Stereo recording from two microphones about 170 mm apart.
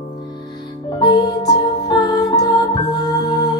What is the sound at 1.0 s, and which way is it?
Music, 20° left (ahead or behind).